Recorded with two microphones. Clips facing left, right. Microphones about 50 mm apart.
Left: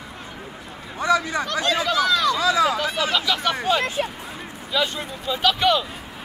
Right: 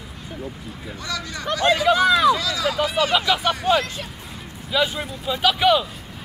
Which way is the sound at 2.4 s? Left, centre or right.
Left.